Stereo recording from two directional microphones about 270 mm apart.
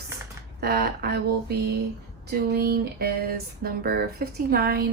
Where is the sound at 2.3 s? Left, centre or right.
Right.